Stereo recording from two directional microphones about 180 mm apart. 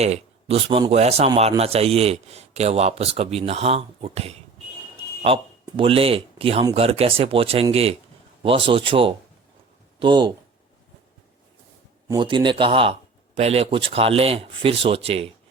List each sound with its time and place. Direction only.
0.0 s a man's voice: 35° right (ahead or behind)
12.0 s a man's voice: 25° right (ahead or behind)